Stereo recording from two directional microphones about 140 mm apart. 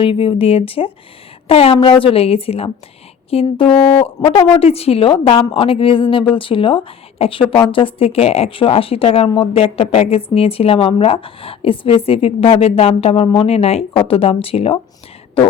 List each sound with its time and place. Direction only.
0.0 s speech: 40° left (ahead or behind)